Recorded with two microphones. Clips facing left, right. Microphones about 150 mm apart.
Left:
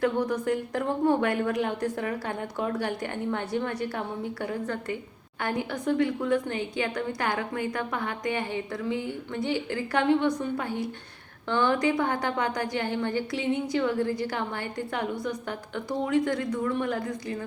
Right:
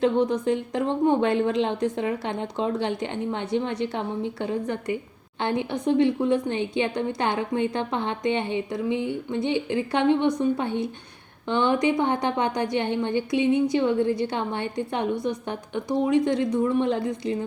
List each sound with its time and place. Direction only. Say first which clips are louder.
0.0 s a woman's voice: right 4 dB; 20° right (ahead or behind)